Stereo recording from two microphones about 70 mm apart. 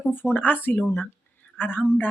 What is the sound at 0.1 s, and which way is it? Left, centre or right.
Speech, left.